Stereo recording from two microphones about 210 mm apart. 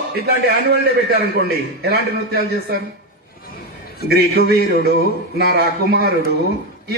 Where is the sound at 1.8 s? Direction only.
45° right (ahead or behind).